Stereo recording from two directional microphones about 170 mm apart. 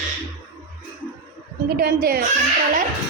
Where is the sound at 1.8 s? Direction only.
60° right (ahead or behind).